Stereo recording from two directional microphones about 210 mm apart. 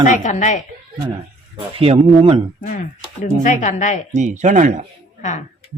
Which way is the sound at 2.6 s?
35° left (ahead or behind).